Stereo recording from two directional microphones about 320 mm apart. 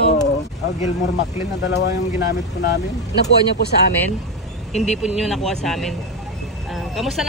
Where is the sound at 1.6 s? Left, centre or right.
Left.